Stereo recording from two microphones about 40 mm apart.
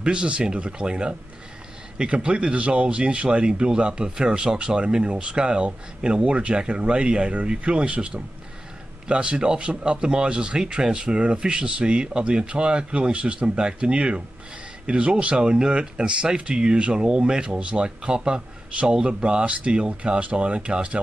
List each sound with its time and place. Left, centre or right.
0.0 s a man's voice: right